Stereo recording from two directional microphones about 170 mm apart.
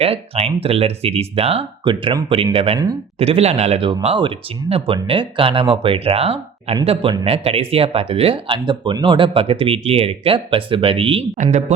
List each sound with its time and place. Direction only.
0.0 s speech: 35° right (ahead or behind)